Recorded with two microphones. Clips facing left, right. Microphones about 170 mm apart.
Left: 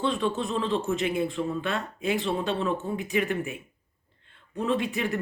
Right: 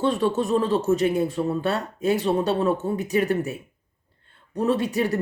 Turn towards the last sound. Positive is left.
turn(degrees=-40)  # may be behind; listen again after turning